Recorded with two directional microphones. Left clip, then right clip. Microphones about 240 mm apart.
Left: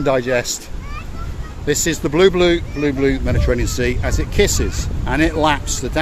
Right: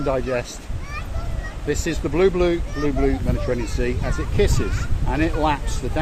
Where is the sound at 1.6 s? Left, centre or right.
Left.